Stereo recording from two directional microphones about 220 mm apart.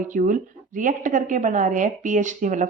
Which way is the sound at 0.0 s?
35° right (ahead or behind).